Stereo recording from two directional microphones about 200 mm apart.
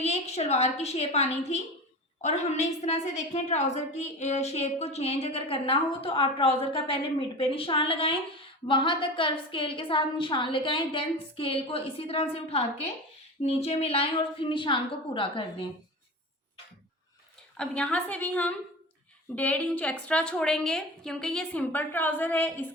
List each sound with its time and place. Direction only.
0.0 s a woman's voice: 30° left (ahead or behind)
17.6 s a woman's voice: 5° left (ahead or behind)